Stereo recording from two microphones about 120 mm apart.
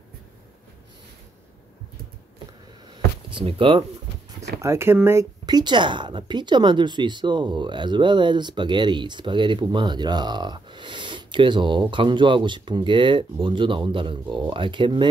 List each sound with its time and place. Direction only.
3.3 s speech: 45° right (ahead or behind)
4.6 s speech: 25° right (ahead or behind)
5.4 s a woman's voice: 35° right (ahead or behind)